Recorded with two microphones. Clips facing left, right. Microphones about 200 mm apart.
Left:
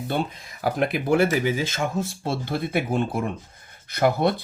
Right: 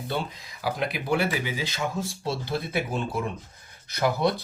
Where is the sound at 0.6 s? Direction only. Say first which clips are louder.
Left 5 dB; 50° left (ahead or behind).